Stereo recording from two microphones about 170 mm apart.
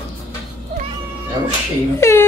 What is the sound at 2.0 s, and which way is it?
Speech, 15° left (ahead or behind).